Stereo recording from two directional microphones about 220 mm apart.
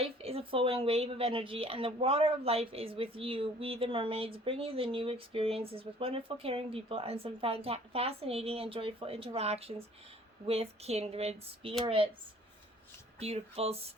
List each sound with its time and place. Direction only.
0.0 s a woman's voice: 25° right (ahead or behind)
13.1 s a woman's voice: 30° right (ahead or behind)